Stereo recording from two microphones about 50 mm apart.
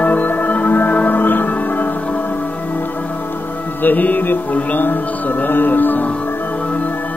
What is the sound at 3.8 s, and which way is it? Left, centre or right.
Music, left.